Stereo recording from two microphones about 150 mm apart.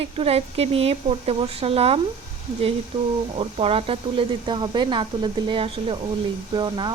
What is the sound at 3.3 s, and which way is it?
Speech, 40° right (ahead or behind).